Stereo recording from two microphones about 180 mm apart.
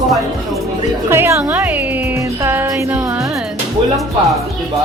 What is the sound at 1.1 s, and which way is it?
Music, 15° right (ahead or behind).